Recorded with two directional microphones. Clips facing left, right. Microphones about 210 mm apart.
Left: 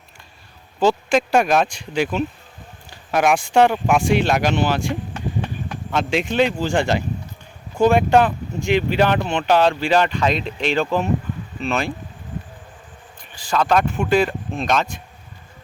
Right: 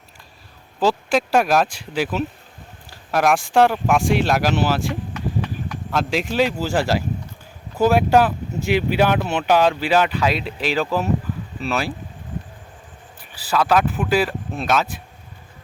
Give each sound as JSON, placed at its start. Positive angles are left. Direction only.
{"t": 0.8, "sound": "speech", "side_deg": 0}
{"t": 5.1, "sound": "a sound", "side_deg": 30}
{"t": 5.9, "sound": "speech", "side_deg": 0}
{"t": 13.3, "sound": "speech", "side_deg": -5}